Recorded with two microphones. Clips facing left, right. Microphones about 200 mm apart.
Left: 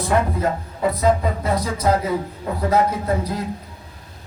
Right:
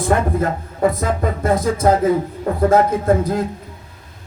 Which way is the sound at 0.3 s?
50° right (ahead or behind).